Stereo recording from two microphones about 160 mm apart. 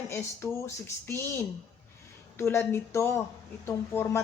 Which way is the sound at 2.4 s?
15° left (ahead or behind).